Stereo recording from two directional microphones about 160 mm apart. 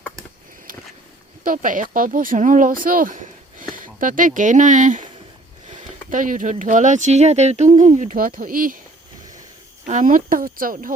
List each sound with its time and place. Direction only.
1.5 s speech: 55° right (ahead or behind)
9.8 s speech: 55° right (ahead or behind)